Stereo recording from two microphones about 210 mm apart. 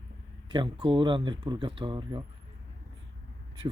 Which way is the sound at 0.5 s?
25° right (ahead or behind).